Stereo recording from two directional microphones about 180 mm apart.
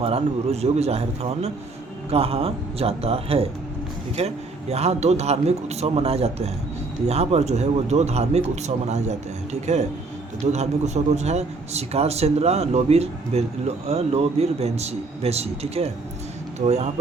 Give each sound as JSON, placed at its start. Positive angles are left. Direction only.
{"t": 0.0, "sound": "a man's voice", "side_deg": -35}